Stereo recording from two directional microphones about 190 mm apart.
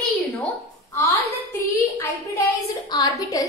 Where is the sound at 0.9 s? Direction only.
15° left (ahead or behind).